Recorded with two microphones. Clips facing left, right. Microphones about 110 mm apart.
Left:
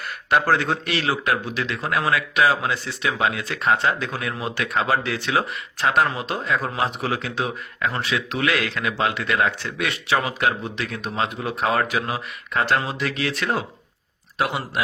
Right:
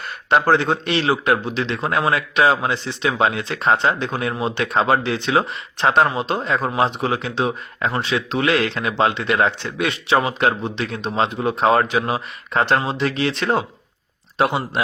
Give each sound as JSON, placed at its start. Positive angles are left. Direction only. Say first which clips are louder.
{"t": 0.3, "sound": "a man's voice", "louder": "right 3 dB", "side_deg": -25}